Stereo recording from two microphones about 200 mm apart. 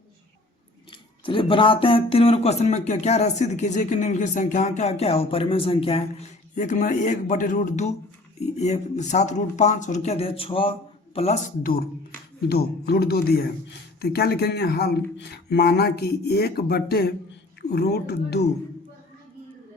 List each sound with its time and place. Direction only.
1.2 s speech: 25° left (ahead or behind)
11.6 s speech: 50° left (ahead or behind)